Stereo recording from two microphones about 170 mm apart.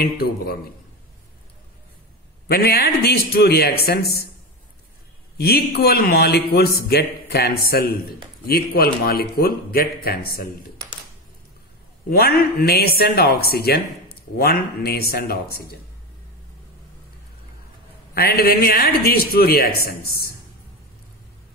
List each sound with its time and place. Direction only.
0.0 s a man's voice: 65° left (ahead or behind)
2.4 s a man's voice: 65° left (ahead or behind)
5.4 s a man's voice: 65° left (ahead or behind)
12.1 s a man's voice: 65° left (ahead or behind)
18.1 s a man's voice: 65° left (ahead or behind)